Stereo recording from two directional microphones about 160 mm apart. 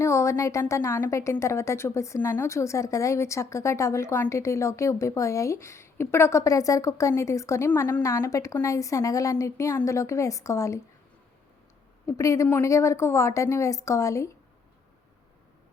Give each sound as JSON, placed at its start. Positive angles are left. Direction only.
{"t": 0.0, "sound": "a woman's voice", "side_deg": 20}
{"t": 12.0, "sound": "a woman's voice", "side_deg": 20}